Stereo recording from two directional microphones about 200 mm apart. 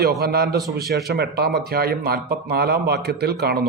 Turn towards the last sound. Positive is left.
turn(degrees=-55)  # may be behind; listen again after turning